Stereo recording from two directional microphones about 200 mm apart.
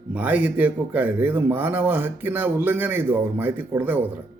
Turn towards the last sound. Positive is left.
turn(degrees=-10)  # may be behind; listen again after turning